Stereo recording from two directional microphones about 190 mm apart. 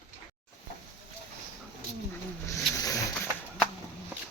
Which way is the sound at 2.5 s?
15° left (ahead or behind).